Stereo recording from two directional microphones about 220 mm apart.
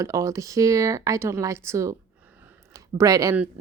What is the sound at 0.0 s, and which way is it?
Speech, 15° right (ahead or behind).